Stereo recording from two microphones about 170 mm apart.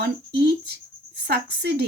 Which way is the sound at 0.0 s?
70° right (ahead or behind).